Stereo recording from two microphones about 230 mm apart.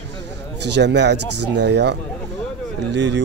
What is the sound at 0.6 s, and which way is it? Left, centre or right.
Speech, right.